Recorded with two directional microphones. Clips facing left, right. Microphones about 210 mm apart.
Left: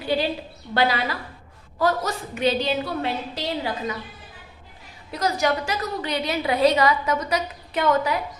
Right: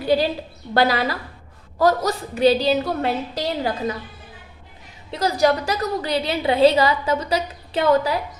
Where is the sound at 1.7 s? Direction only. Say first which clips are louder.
Right 4 dB; 40° right (ahead or behind).